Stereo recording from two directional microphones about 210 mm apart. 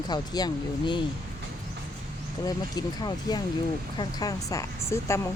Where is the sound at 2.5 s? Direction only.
20° left (ahead or behind).